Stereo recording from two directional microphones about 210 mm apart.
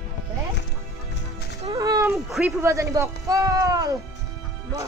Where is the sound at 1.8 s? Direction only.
15° right (ahead or behind).